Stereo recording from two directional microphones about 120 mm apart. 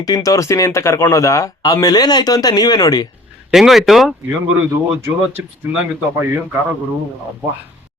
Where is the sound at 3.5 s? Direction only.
Centre (ahead or behind).